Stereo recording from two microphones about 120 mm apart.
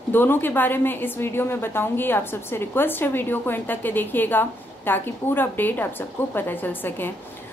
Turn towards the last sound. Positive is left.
turn(degrees=15)  # may be behind; listen again after turning